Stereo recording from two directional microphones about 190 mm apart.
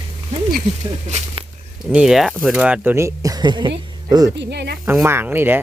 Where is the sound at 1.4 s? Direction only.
30° right (ahead or behind).